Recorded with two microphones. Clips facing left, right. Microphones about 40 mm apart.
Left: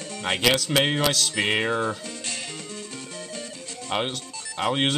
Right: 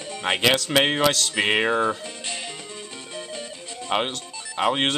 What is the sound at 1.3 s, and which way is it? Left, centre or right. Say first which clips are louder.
Music: right 3 dB; centre.